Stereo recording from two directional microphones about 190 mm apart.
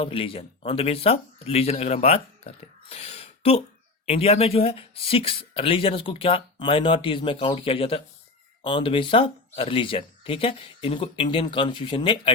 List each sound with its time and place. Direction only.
0.0 s speech: 30° left (ahead or behind)